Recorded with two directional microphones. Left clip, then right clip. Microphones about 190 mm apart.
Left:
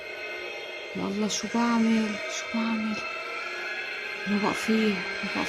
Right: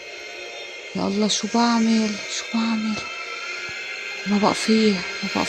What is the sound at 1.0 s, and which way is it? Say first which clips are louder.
Speech: right 8 dB; 20° right (ahead or behind).